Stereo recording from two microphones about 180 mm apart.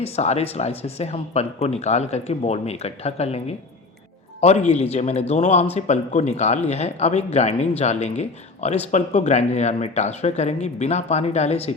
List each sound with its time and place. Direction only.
0.0 s speech: 35° left (ahead or behind)